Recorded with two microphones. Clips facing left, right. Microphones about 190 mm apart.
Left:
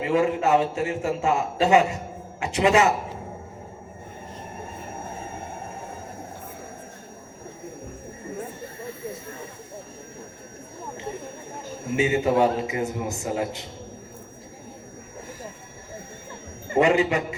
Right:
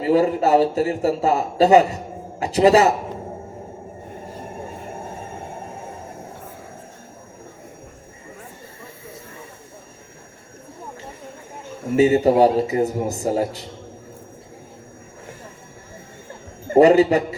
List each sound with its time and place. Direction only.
0.0 s a man's voice: 35° right (ahead or behind)
11.9 s a man's voice: 35° right (ahead or behind)
16.6 s a man's voice: 35° right (ahead or behind)